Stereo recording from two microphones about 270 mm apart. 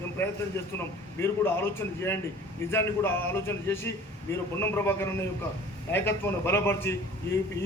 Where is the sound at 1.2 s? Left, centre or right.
Centre.